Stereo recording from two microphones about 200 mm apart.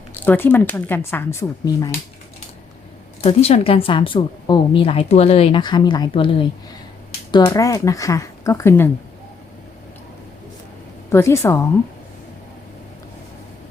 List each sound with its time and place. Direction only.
0.1 s speech: 10° left (ahead or behind)
3.2 s a woman's voice: 30° left (ahead or behind); by 8.9 s 10° left (ahead or behind)
11.1 s speech: 15° left (ahead or behind)